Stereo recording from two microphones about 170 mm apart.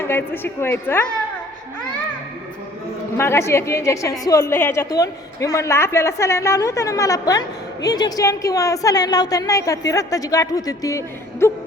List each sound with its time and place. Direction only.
0.0 s a man's voice: 15° left (ahead or behind)
3.2 s a man's voice: 15° left (ahead or behind)